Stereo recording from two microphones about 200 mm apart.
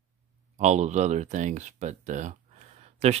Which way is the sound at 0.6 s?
35° right (ahead or behind).